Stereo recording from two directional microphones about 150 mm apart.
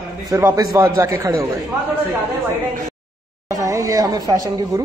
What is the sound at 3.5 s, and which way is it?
A woman's voice, 20° right (ahead or behind).